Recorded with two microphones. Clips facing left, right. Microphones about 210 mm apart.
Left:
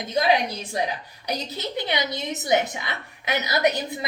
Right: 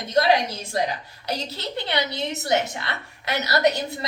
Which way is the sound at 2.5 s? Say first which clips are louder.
Left 2 dB; 15° left (ahead or behind).